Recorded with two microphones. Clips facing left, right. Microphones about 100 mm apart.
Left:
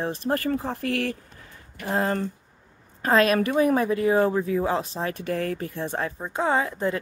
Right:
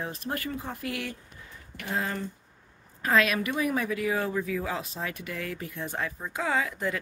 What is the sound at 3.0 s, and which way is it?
A woman's voice, 40° left (ahead or behind).